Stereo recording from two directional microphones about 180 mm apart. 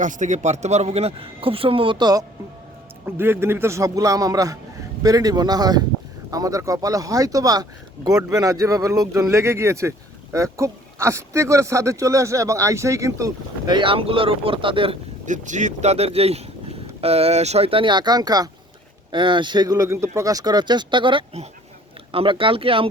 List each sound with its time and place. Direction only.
0.0 s speech: 45° right (ahead or behind); by 2.2 s 25° right (ahead or behind)
3.2 s speech: 15° right (ahead or behind); by 14.9 s 30° right (ahead or behind)
15.3 s speech: 45° right (ahead or behind)